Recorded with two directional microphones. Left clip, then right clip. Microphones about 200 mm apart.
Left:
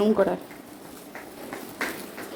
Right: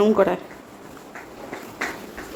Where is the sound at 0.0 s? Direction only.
10° right (ahead or behind).